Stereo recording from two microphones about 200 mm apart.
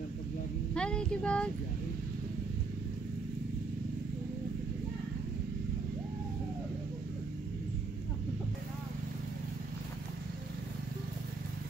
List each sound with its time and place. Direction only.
0.7 s child singing: 5° left (ahead or behind)